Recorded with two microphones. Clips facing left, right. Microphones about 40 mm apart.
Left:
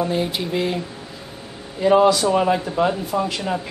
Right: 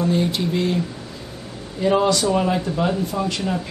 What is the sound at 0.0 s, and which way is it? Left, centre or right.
Speech, centre.